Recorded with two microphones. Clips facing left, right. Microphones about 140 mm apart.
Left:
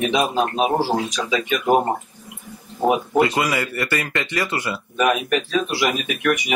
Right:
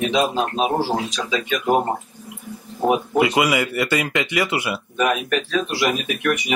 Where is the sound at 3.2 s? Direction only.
15° right (ahead or behind).